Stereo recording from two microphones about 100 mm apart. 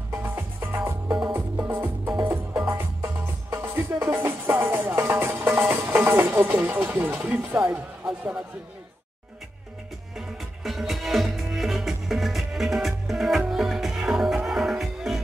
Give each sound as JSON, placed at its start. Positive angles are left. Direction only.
{"t": 0.1, "sound": "music", "side_deg": -25}
{"t": 7.2, "sound": "speech", "side_deg": -10}
{"t": 10.1, "sound": "music", "side_deg": -5}